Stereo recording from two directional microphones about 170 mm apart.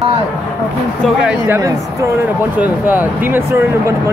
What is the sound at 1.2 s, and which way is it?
Speech, 5° right (ahead or behind).